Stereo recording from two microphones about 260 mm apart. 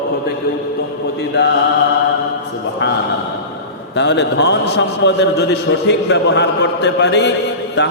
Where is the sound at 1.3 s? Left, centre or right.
Left.